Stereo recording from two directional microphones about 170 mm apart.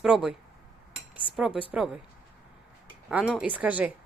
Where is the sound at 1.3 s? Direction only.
5° right (ahead or behind).